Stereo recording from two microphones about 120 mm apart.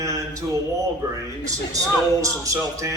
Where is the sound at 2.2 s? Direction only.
30° right (ahead or behind).